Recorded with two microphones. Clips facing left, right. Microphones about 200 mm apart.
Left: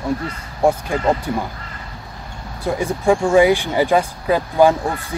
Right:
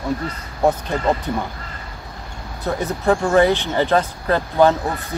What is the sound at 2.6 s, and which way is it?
Speech, 10° left (ahead or behind).